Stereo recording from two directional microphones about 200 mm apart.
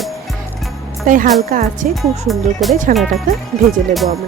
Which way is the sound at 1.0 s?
40° right (ahead or behind).